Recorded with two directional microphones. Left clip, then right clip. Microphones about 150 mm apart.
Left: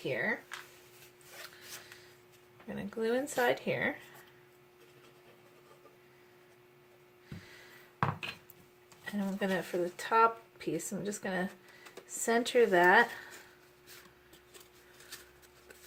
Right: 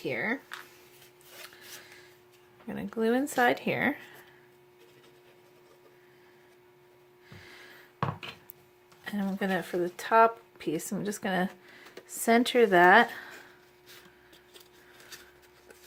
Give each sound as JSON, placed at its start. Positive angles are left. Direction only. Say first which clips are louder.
{"t": 0.0, "sound": "speech", "louder": "right 2 dB", "side_deg": -45}
{"t": 2.6, "sound": "speech", "louder": "right 5 dB", "side_deg": -40}
{"t": 9.0, "sound": "speech", "louder": "right 3 dB", "side_deg": -45}